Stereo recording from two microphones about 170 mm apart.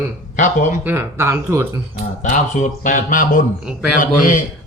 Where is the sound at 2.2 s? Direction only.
50° left (ahead or behind).